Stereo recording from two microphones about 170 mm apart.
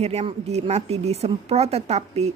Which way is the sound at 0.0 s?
40° right (ahead or behind).